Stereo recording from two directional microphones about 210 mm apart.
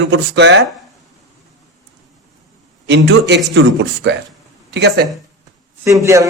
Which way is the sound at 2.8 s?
55° right (ahead or behind).